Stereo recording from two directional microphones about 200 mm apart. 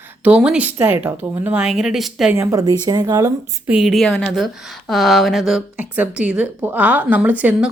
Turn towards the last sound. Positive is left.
turn(degrees=-10)  # may be behind; listen again after turning